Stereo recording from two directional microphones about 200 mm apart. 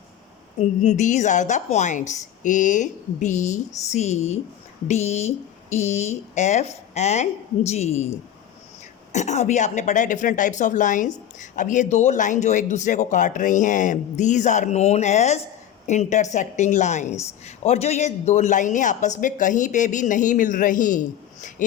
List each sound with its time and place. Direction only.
0.6 s a woman's voice: 35° left (ahead or behind)